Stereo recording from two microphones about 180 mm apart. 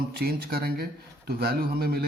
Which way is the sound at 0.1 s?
60° right (ahead or behind).